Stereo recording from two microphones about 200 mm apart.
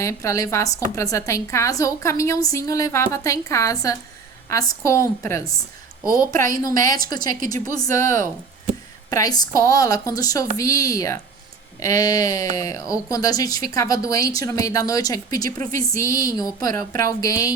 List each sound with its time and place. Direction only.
0.0 s a woman's voice: 15° left (ahead or behind)